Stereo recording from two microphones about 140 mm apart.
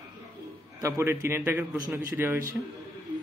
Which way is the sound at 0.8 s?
20° right (ahead or behind).